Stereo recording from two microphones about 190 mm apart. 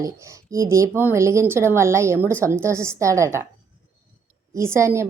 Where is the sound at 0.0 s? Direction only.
15° right (ahead or behind).